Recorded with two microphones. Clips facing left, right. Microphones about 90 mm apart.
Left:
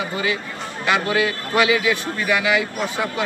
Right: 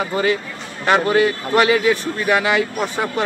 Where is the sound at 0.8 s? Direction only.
40° right (ahead or behind).